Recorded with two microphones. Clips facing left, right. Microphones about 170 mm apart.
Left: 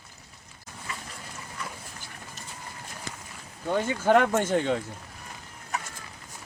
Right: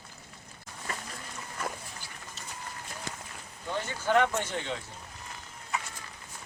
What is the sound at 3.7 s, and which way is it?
Speech, 50° left (ahead or behind).